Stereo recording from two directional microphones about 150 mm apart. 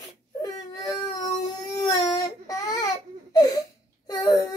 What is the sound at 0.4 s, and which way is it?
Baby cry, 25° left (ahead or behind).